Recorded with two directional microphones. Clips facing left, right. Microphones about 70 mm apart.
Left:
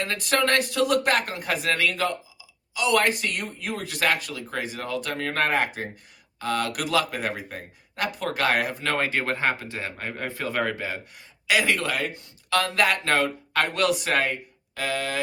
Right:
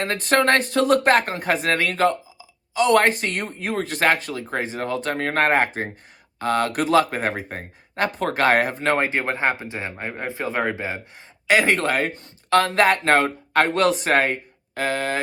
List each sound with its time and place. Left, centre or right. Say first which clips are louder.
0.0 s speech: right 5 dB; right
11.4 s speech: right 5 dB; right